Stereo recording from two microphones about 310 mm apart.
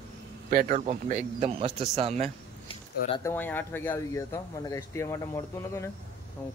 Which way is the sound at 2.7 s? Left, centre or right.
Centre.